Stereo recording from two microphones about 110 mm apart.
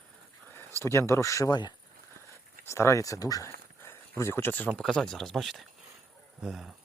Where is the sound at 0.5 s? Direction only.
20° left (ahead or behind).